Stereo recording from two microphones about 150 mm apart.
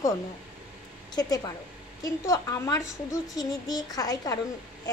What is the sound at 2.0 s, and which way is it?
A woman's voice, 20° left (ahead or behind).